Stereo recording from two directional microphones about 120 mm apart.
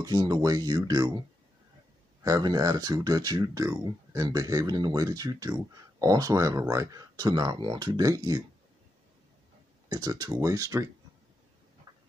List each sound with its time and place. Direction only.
0.0 s speech: 35° right (ahead or behind)
2.2 s speech: 35° right (ahead or behind)
9.8 s speech: 35° right (ahead or behind)
11.9 s tick-tock: 35° right (ahead or behind)